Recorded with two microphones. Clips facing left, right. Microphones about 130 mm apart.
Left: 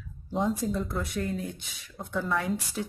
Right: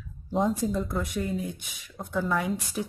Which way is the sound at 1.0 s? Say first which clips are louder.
Right 1 dB; 15° right (ahead or behind).